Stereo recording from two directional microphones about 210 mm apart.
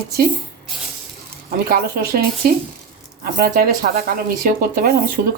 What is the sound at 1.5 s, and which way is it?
Speech, 45° right (ahead or behind).